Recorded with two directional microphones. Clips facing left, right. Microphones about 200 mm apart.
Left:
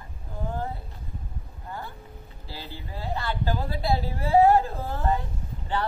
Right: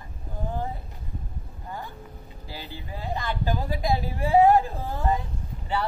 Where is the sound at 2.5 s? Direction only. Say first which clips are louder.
Right 1 dB; 15° right (ahead or behind).